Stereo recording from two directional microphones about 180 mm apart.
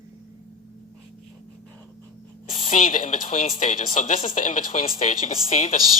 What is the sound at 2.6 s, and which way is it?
Speech, 40° left (ahead or behind).